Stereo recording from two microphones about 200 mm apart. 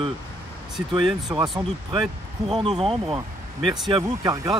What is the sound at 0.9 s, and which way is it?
Speech, 20° right (ahead or behind).